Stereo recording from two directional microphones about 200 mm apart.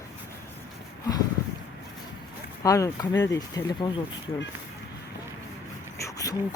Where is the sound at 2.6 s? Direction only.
15° left (ahead or behind).